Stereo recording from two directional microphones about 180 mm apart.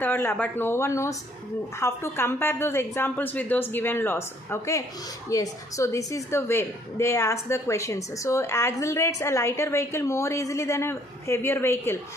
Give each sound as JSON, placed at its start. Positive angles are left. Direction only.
{"t": 0.0, "sound": "a woman's voice", "side_deg": 10}